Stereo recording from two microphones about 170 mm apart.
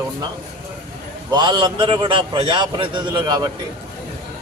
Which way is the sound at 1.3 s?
25° right (ahead or behind).